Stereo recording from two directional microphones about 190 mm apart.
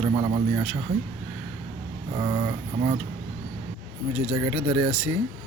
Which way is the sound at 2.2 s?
20° right (ahead or behind).